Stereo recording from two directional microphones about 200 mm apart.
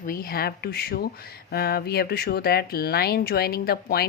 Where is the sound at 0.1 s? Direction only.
45° left (ahead or behind).